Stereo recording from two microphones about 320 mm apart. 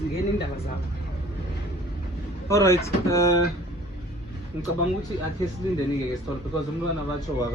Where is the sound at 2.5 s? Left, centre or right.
Centre.